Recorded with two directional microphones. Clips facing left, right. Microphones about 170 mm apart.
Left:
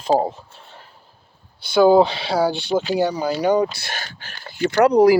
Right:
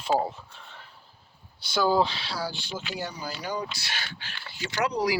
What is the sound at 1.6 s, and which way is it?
Speech, 55° left (ahead or behind).